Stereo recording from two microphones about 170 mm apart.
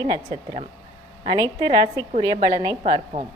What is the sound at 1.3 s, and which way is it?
A woman's voice, 25° right (ahead or behind).